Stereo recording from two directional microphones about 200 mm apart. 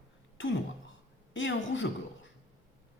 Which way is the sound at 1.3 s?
65° left (ahead or behind).